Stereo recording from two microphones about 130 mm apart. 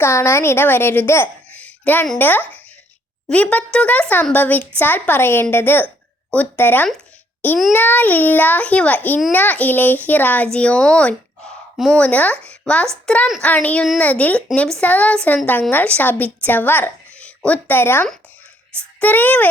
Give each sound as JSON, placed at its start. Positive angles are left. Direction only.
{"t": 0.0, "sound": "a child's voice", "side_deg": 20}